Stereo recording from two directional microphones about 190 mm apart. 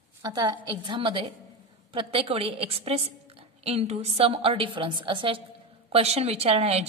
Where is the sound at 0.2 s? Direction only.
20° right (ahead or behind).